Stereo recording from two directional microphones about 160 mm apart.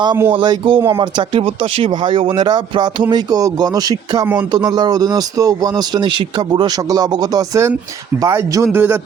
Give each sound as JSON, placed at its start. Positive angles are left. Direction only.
{"t": 0.3, "sound": "a man's voice", "side_deg": -30}